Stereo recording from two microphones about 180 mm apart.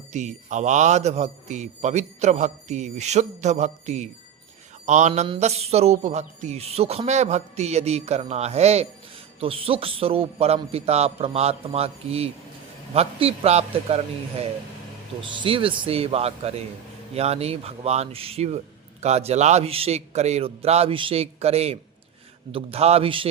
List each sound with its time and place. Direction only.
0.1 s speech: 40° right (ahead or behind)
15.2 s speech: 25° right (ahead or behind)